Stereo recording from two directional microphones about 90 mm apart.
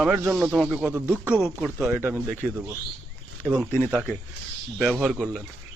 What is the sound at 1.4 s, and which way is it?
Speech, centre (ahead or behind).